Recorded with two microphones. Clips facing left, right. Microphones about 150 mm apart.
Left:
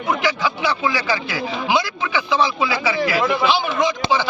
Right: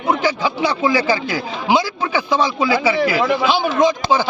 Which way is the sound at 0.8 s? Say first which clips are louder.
Right 5 dB; 40° right (ahead or behind).